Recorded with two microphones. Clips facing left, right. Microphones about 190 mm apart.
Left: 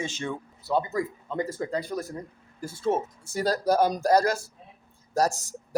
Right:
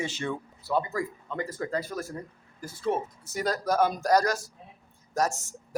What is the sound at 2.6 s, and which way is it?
A man's voice, 25° left (ahead or behind).